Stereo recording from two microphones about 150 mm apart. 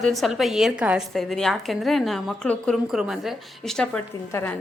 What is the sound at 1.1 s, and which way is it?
A woman's voice, centre (ahead or behind).